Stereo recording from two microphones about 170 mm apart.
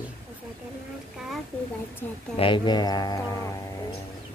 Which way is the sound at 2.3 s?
30° left (ahead or behind).